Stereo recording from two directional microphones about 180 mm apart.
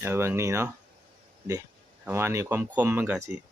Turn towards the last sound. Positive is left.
turn(degrees=-15)  # may be behind; listen again after turning